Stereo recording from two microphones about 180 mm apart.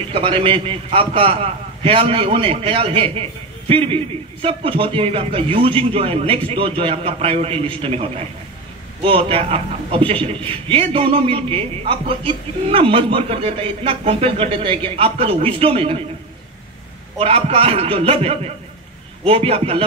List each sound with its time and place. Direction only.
0.1 s a man's voice: 30° right (ahead or behind)
17.2 s a man's voice: 30° right (ahead or behind)